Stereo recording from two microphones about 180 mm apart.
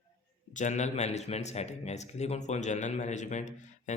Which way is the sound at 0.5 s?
40° left (ahead or behind).